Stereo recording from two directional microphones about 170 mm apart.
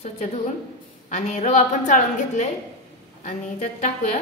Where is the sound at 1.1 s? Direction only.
40° left (ahead or behind).